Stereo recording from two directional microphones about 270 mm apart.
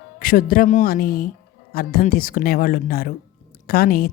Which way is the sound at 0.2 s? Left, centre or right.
Left.